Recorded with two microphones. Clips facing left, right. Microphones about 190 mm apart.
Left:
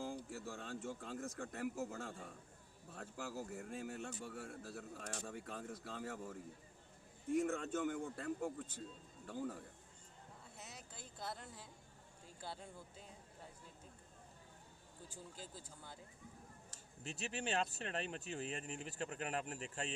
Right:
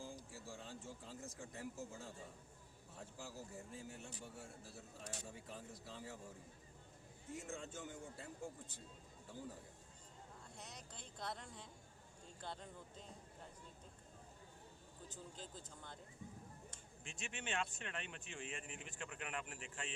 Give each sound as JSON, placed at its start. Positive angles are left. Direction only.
{"t": 0.3, "sound": "speech", "side_deg": 65}
{"t": 5.2, "sound": "speech", "side_deg": 70}
{"t": 10.6, "sound": "a sound", "side_deg": 5}
{"t": 12.4, "sound": "speech", "side_deg": 10}
{"t": 15.1, "sound": "speech", "side_deg": 10}
{"t": 16.7, "sound": "speech", "side_deg": 40}